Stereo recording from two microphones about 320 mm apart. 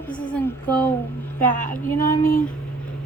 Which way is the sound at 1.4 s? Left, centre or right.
Left.